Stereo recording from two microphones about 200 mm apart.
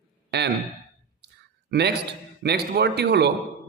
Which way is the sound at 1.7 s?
55° right (ahead or behind).